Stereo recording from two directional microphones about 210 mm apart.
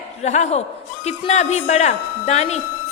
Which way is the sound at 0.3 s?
35° left (ahead or behind).